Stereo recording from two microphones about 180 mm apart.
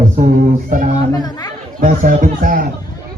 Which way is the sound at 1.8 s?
50° right (ahead or behind).